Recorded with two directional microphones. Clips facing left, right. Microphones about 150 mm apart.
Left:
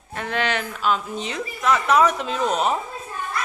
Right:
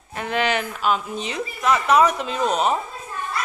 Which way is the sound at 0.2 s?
15° right (ahead or behind).